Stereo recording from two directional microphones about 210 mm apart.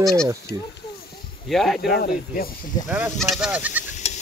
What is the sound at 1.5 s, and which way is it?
Speech, centre (ahead or behind).